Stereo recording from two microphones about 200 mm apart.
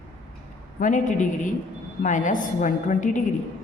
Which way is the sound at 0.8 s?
40° left (ahead or behind).